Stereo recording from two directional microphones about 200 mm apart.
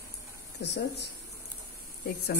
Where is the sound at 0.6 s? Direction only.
60° left (ahead or behind).